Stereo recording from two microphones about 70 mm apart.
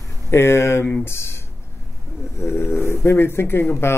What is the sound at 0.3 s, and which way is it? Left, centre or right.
Speech, left.